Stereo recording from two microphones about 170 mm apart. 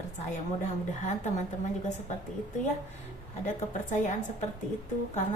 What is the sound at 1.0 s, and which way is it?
Speech, 45° left (ahead or behind).